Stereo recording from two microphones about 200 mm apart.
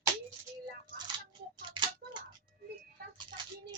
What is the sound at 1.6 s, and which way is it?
Tick, 25° right (ahead or behind).